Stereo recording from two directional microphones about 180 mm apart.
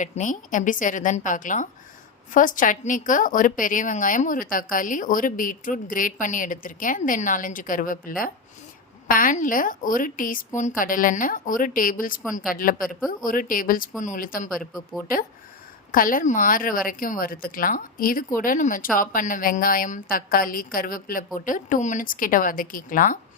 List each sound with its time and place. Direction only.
0.0 s a woman's voice: 45° left (ahead or behind)
15.9 s a woman's voice: 50° left (ahead or behind)